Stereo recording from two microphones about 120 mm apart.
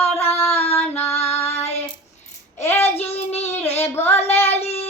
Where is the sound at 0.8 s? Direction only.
15° left (ahead or behind).